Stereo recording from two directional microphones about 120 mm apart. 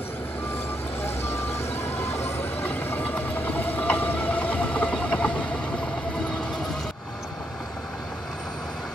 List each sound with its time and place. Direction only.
1.9 s vehicle: 15° left (ahead or behind)